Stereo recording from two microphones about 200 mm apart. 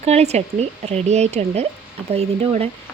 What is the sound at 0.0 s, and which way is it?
A woman's voice, 30° right (ahead or behind).